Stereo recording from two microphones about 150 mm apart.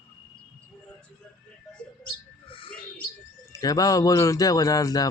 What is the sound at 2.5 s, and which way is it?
Bird, 35° left (ahead or behind).